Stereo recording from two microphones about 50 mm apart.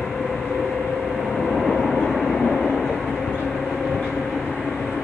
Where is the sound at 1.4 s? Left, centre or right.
Centre.